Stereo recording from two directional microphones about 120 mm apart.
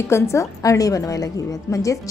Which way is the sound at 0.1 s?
25° left (ahead or behind).